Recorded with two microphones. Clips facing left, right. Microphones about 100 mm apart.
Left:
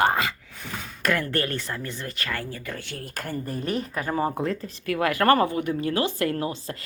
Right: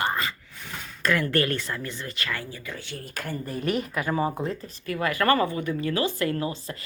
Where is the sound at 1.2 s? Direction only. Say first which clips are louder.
Right 2 dB; 30° left (ahead or behind); by 3.1 s 65° left (ahead or behind).